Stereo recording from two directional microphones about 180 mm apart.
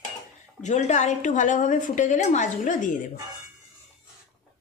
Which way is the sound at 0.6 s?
40° left (ahead or behind).